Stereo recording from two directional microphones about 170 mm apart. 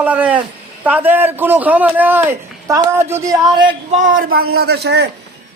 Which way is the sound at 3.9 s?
50° right (ahead or behind).